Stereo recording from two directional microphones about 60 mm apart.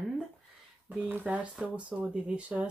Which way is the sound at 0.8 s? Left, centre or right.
Right.